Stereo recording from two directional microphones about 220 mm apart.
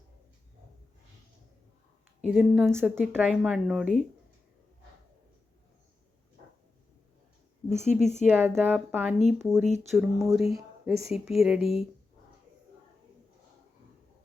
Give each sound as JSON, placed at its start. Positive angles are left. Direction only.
{"t": 2.2, "sound": "a woman's voice", "side_deg": -5}
{"t": 7.9, "sound": "speech", "side_deg": 30}
{"t": 8.3, "sound": "a woman's voice", "side_deg": -10}